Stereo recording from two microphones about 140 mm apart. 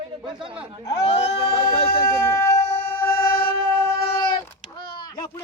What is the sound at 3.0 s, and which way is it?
Train, 35° left (ahead or behind).